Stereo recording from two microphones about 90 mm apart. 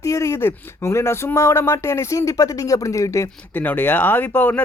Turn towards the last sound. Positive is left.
turn(degrees=20)  # may be behind; listen again after turning